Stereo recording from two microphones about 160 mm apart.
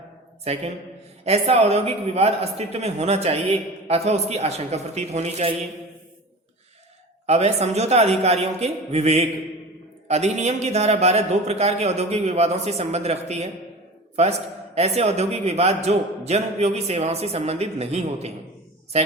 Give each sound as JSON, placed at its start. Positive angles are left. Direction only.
{"t": 0.5, "sound": "a man's voice", "side_deg": -40}
{"t": 7.3, "sound": "a man's voice", "side_deg": -45}